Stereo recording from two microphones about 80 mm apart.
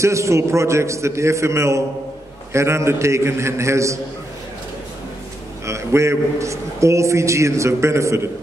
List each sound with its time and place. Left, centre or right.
0.0 s a man's voice: right
5.7 s a man's voice: right